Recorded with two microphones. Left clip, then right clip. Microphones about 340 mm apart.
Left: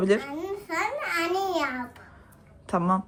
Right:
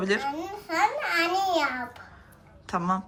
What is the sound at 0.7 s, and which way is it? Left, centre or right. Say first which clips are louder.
Babbling: right 4 dB; centre.